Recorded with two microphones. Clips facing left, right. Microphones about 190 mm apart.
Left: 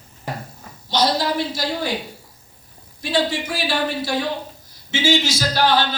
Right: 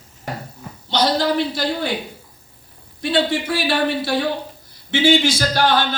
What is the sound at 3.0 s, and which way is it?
Speech, 60° right (ahead or behind).